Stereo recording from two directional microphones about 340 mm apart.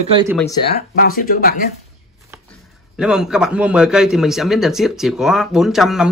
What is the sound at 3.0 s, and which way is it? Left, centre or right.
A man's voice, centre.